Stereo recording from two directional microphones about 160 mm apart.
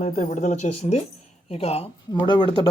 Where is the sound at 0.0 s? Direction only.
50° left (ahead or behind).